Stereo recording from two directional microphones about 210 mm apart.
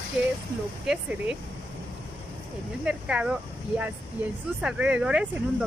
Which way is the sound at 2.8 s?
5° right (ahead or behind).